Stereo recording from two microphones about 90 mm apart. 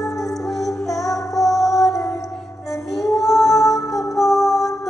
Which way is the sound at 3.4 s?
40° left (ahead or behind).